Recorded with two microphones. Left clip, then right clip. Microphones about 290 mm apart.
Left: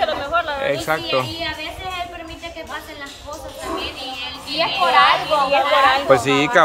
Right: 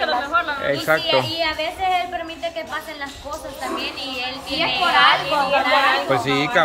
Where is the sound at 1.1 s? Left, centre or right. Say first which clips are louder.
Right 2 dB; centre.